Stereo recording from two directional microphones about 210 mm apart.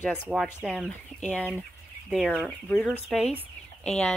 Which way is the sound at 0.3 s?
Centre (ahead or behind).